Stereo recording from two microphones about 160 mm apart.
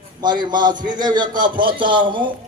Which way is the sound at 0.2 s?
25° right (ahead or behind).